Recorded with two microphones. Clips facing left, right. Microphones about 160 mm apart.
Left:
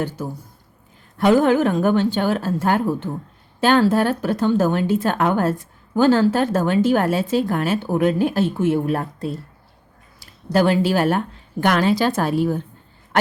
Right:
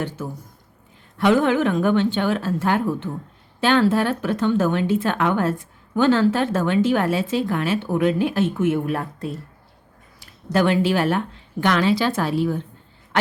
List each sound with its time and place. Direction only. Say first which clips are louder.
0.2 s a woman's voice: left 2 dB; 35° left (ahead or behind)